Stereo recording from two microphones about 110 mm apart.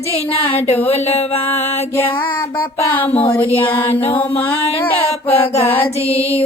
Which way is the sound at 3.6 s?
15° left (ahead or behind).